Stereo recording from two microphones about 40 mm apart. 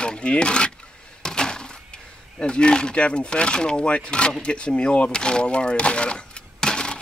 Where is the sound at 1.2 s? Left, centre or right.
Centre.